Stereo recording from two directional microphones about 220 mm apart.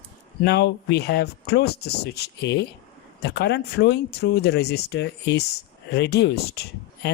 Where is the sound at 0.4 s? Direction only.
50° left (ahead or behind).